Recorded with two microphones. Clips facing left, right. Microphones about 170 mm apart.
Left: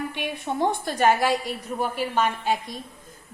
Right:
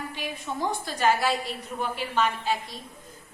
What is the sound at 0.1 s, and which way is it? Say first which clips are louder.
A woman's voice: left 4 dB; 65° left (ahead or behind).